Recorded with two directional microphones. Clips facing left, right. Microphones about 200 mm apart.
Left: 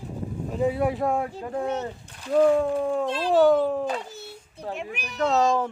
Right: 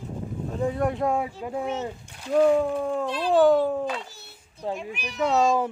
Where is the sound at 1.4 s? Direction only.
10° right (ahead or behind).